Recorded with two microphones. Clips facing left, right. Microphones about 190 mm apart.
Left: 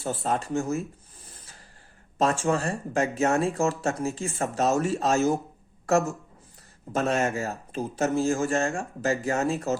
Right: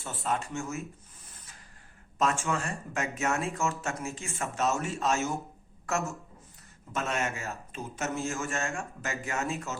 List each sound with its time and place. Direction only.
0.0 s speech: 35° left (ahead or behind)
2.1 s speech: 35° left (ahead or behind)